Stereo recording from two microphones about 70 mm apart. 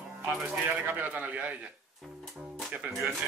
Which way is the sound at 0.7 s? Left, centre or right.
Right.